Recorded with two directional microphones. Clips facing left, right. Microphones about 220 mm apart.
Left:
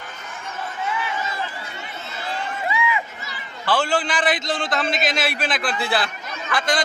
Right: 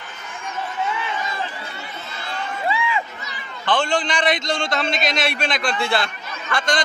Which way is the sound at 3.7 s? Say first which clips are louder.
Right 1 dB; 5° left (ahead or behind).